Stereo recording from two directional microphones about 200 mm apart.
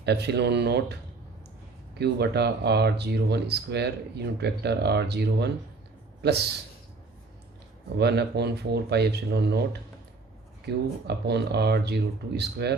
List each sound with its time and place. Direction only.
0.0 s speech: 55° right (ahead or behind)
2.0 s speech: 55° right (ahead or behind)
7.9 s speech: 55° right (ahead or behind)
10.7 s speech: 55° right (ahead or behind)